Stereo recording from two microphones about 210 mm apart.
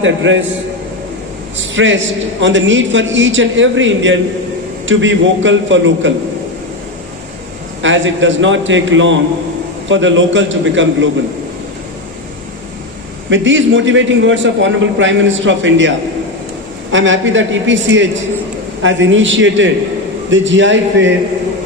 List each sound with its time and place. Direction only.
0.0 s a man's voice: 65° right (ahead or behind)
1.5 s a man's voice: 65° right (ahead or behind)
7.8 s a man's voice: 65° right (ahead or behind)
13.3 s a man's voice: 65° right (ahead or behind)
16.9 s a man's voice: 65° right (ahead or behind)